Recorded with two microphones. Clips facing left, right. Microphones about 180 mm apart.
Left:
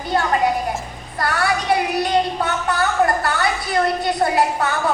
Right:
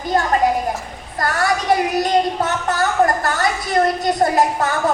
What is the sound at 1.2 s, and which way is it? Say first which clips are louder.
Speech: right 1 dB; 45° right (ahead or behind).